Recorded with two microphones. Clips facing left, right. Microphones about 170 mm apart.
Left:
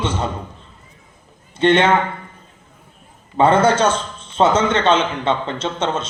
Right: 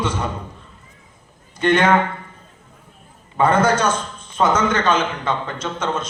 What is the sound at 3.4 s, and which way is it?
A man's voice, 30° left (ahead or behind).